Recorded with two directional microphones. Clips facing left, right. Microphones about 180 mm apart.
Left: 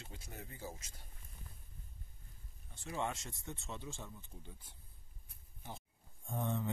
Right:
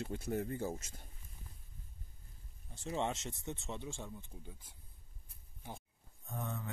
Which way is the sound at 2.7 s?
25° right (ahead or behind).